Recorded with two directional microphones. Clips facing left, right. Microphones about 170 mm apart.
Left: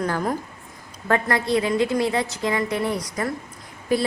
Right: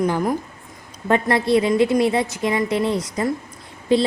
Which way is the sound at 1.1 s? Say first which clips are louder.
Right 4 dB; 25° right (ahead or behind).